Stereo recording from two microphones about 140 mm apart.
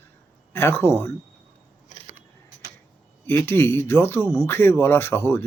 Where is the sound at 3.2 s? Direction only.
15° left (ahead or behind).